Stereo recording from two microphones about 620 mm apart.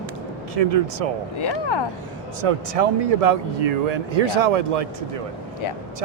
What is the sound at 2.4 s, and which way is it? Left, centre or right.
Speech, right.